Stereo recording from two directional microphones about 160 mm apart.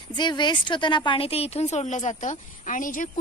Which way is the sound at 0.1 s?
30° left (ahead or behind).